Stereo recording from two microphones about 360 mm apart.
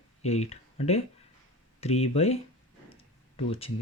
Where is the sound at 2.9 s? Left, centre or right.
Centre.